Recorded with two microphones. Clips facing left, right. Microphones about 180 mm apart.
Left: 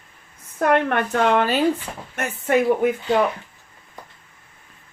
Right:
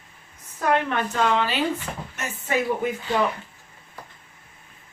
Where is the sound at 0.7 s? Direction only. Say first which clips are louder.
Left 3 dB; 60° left (ahead or behind).